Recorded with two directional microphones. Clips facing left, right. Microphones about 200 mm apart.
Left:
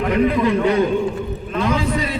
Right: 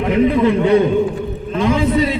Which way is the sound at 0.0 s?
25° right (ahead or behind).